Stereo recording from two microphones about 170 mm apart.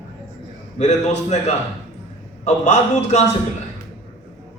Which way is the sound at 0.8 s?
45° left (ahead or behind).